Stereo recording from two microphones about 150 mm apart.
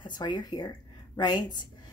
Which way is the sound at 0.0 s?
30° left (ahead or behind).